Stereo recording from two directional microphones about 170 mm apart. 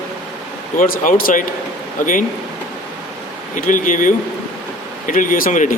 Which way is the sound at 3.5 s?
50° left (ahead or behind).